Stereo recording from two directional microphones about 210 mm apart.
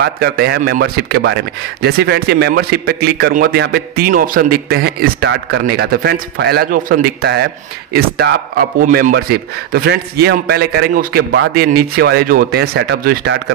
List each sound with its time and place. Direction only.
0.0 s speech: 50° right (ahead or behind)